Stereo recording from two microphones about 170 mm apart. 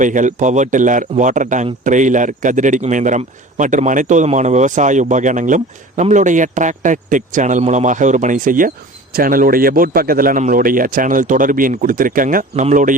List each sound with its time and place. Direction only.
0.0 s a man's voice: 50° right (ahead or behind)